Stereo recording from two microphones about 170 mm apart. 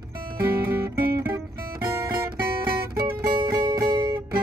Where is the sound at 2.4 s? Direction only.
65° right (ahead or behind).